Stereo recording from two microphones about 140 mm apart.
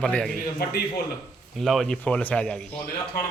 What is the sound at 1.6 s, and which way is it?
Speech, 5° left (ahead or behind).